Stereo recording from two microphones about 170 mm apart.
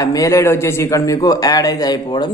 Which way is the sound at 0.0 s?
20° left (ahead or behind).